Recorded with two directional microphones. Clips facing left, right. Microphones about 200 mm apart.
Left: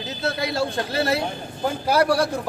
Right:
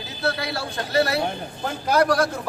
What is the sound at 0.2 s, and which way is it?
Speech, 20° left (ahead or behind).